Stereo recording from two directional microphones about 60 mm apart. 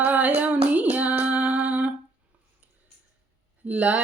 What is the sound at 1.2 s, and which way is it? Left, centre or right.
Female singing, right.